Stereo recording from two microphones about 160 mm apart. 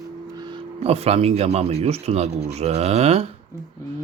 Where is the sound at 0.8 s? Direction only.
40° right (ahead or behind).